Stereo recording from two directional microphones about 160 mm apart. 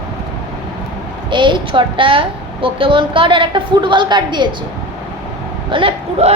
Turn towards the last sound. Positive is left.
turn(degrees=-35)  # may be behind; listen again after turning